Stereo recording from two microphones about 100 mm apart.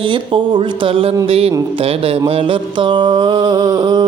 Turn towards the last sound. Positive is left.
turn(degrees=-45)  # may be behind; listen again after turning